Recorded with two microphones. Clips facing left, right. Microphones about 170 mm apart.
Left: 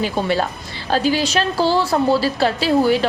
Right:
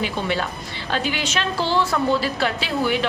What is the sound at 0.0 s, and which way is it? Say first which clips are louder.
A woman's voice: left 5 dB; 35° left (ahead or behind).